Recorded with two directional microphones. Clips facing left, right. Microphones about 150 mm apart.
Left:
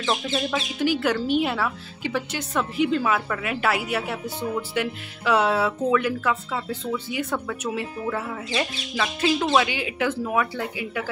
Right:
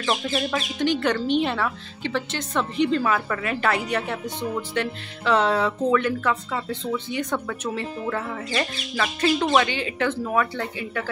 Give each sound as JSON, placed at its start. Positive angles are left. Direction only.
{"t": 0.0, "sound": "speech", "side_deg": 0}